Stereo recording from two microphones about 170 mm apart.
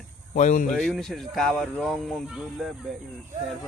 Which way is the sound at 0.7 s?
Centre (ahead or behind).